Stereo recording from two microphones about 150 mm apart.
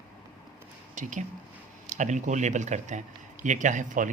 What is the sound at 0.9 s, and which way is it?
Speech, 55° right (ahead or behind).